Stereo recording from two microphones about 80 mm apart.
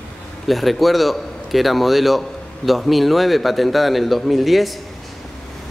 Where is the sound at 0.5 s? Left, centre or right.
Centre.